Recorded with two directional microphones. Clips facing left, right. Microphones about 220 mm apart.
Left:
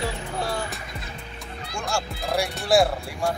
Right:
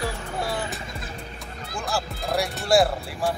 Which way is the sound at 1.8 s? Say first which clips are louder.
Even; centre (ahead or behind).